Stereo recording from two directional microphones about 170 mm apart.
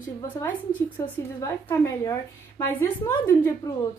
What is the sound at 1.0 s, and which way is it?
A woman's voice, 20° left (ahead or behind).